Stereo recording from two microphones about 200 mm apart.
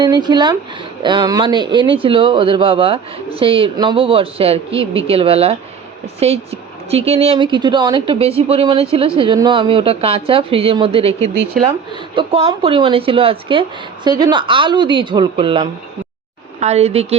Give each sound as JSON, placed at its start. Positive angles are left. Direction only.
{"t": 0.0, "sound": "a woman's voice", "side_deg": -20}